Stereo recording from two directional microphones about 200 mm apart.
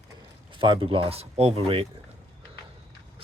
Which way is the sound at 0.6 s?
25° right (ahead or behind).